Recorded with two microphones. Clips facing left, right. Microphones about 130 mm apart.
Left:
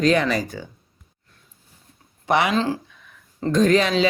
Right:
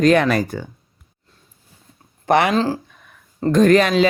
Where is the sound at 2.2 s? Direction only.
50° right (ahead or behind).